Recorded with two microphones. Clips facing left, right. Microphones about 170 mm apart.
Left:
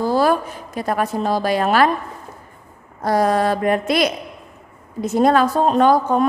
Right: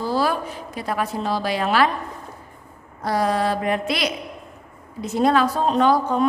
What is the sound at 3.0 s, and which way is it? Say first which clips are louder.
A woman's voice: left 4 dB; 45° left (ahead or behind).